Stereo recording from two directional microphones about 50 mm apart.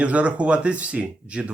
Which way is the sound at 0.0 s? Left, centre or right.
Right.